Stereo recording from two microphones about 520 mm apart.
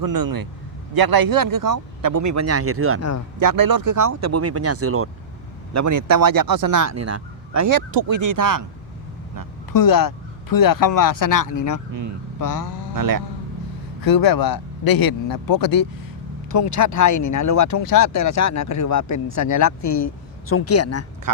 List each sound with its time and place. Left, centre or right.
0.0 s speech: right
3.4 s speech: right
9.7 s speech: left
13.0 s speech: right
14.0 s speech: left
19.8 s speech: left
20.5 s speech: left